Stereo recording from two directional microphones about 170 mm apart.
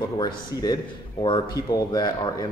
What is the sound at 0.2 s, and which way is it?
Speech, 25° left (ahead or behind).